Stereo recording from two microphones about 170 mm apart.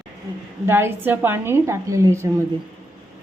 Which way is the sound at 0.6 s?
15° right (ahead or behind).